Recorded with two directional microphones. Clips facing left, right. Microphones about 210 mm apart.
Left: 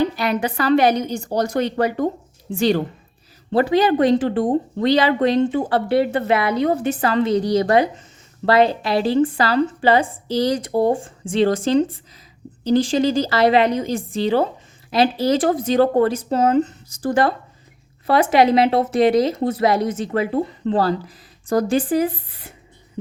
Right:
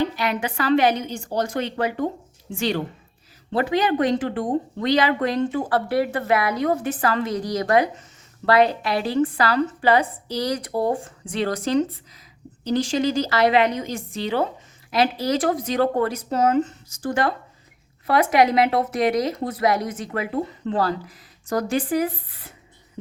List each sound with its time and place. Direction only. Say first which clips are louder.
0.0 s a woman's voice: left 4 dB; 40° left (ahead or behind)